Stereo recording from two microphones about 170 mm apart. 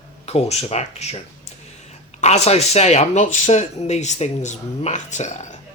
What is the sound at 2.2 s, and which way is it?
Speech, 40° left (ahead or behind).